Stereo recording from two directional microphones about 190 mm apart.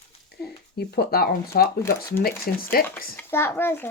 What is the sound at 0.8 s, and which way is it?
Speech, 55° left (ahead or behind).